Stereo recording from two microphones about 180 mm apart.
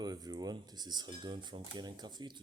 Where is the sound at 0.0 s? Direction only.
20° right (ahead or behind).